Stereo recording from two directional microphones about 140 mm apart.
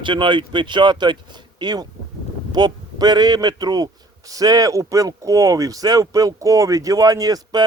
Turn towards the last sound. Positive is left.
turn(degrees=-30)  # may be behind; listen again after turning